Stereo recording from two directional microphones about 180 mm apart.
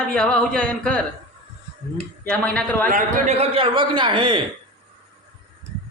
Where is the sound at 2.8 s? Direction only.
45° right (ahead or behind); by 4.4 s 25° right (ahead or behind).